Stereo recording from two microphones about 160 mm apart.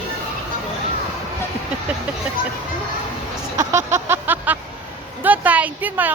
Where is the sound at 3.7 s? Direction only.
15° right (ahead or behind).